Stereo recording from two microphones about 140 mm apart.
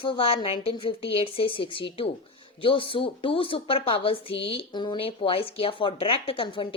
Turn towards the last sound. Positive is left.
turn(degrees=35)  # may be behind; listen again after turning